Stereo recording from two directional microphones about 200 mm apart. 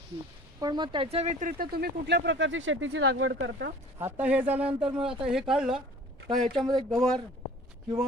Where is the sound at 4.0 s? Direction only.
10° right (ahead or behind).